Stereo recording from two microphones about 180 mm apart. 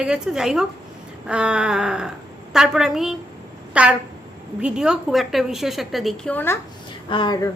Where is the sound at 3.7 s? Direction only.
5° right (ahead or behind).